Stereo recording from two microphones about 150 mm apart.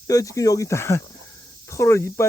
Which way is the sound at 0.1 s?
20° left (ahead or behind).